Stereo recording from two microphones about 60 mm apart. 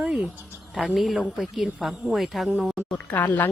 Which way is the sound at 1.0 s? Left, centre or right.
Centre.